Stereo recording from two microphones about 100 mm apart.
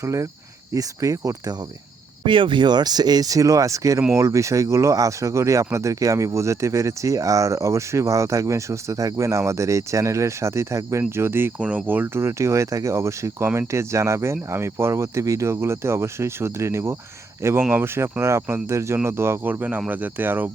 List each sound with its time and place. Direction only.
0.0 s speech: 30° right (ahead or behind)
2.2 s speech: 55° right (ahead or behind); by 17.0 s 30° right (ahead or behind)
17.6 s speech: 15° right (ahead or behind)